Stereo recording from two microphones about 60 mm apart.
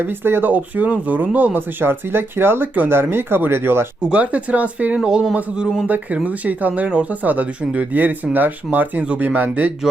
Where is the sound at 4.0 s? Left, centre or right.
Centre.